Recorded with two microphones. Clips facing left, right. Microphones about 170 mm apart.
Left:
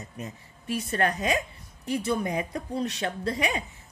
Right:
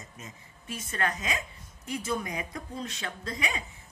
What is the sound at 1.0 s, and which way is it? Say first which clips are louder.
A woman's voice: left 5 dB; 35° left (ahead or behind).